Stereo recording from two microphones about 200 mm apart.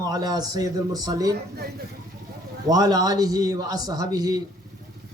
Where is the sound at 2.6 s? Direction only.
20° right (ahead or behind).